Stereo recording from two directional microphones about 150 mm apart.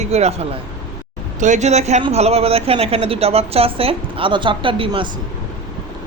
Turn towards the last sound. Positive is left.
turn(degrees=-35)  # may be behind; listen again after turning